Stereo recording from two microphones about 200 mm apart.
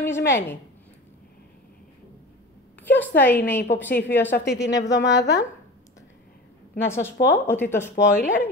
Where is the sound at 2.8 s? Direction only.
10° left (ahead or behind).